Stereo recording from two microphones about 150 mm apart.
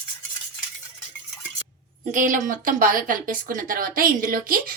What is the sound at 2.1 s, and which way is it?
A woman's voice, 60° right (ahead or behind).